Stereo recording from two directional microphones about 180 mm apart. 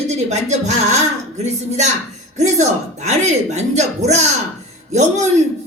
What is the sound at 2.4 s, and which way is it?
Speech, 40° right (ahead or behind).